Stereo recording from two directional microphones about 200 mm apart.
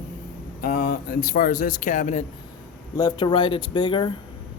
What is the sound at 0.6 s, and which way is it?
Speech, 45° left (ahead or behind).